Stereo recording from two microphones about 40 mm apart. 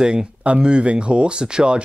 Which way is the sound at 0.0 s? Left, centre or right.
Right.